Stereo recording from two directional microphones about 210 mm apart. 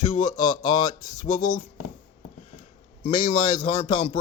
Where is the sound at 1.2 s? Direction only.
90° left.